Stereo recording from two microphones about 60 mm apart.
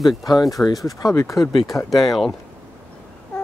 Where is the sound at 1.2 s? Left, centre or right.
Left.